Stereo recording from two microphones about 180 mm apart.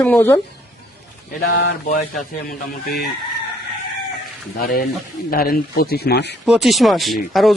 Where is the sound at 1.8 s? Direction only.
45° left (ahead or behind).